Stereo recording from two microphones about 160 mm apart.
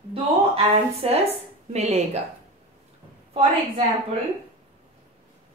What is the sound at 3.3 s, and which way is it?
Speech, 45° right (ahead or behind).